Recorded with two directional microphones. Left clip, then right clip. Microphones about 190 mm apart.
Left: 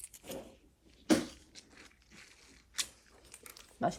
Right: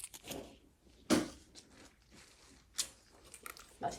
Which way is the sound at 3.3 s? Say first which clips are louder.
Right 3 dB; centre (ahead or behind).